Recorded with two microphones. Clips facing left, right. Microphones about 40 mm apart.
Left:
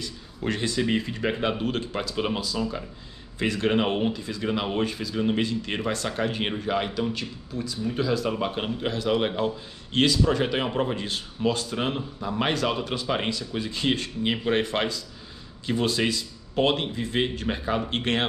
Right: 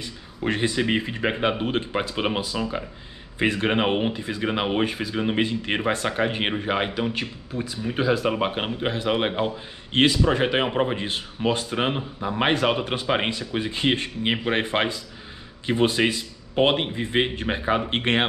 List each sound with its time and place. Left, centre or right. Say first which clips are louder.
0.0 s speech: right 3 dB; right